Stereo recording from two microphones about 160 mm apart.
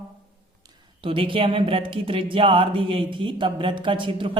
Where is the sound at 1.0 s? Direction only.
35° right (ahead or behind).